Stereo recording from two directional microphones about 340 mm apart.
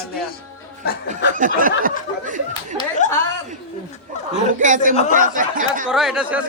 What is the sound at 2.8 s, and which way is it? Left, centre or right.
Speech, left.